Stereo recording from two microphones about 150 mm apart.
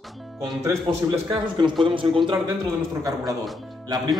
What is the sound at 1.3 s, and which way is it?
Speech, 30° right (ahead or behind).